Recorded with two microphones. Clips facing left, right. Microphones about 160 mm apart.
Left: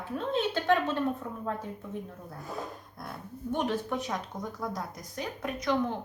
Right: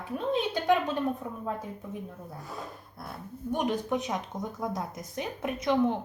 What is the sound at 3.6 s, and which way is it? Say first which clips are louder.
Speech: right 3 dB; 15° right (ahead or behind).